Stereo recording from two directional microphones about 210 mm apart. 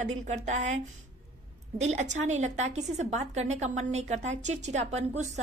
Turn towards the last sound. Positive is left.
turn(degrees=-30)  # may be behind; listen again after turning